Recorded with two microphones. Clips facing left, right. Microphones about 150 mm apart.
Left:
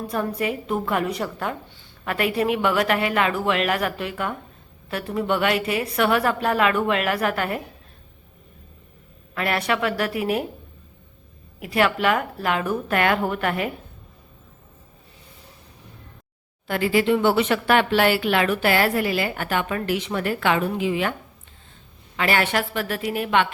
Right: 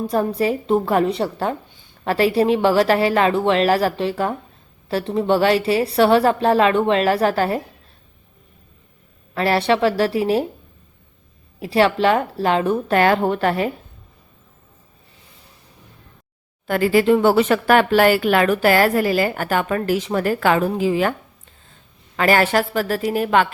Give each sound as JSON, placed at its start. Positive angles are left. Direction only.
{"t": 0.1, "sound": "speech", "side_deg": -30}
{"t": 9.3, "sound": "a woman's voice", "side_deg": -30}
{"t": 11.6, "sound": "a woman's voice", "side_deg": -30}
{"t": 16.6, "sound": "speech", "side_deg": -45}